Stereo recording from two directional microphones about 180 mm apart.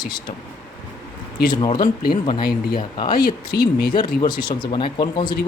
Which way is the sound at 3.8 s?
25° left (ahead or behind).